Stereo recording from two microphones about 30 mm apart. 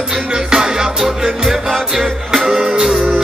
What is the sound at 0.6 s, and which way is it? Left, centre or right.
Music, centre.